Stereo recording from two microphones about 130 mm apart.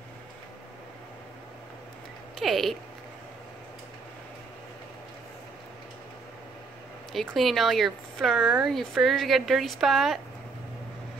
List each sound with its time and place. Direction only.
2.3 s speech: centre (ahead or behind)
7.1 s speech: centre (ahead or behind)